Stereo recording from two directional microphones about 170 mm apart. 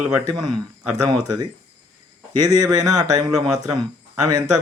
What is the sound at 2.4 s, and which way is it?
Speech, 25° right (ahead or behind).